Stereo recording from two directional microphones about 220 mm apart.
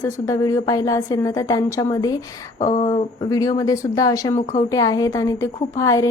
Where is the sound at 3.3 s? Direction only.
15° left (ahead or behind).